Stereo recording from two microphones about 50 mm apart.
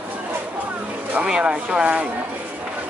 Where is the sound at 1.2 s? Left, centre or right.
Centre.